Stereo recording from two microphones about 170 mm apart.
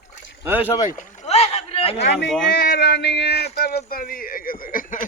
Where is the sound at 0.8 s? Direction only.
45° left (ahead or behind).